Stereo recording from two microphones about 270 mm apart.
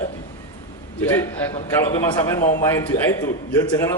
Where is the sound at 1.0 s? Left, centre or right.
Centre.